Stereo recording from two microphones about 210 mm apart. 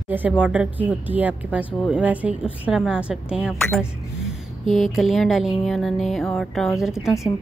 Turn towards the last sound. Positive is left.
turn(degrees=0)  # may be behind; listen again after turning